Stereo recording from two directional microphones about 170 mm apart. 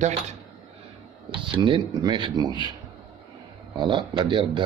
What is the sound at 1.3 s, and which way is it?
A man's voice, 30° right (ahead or behind).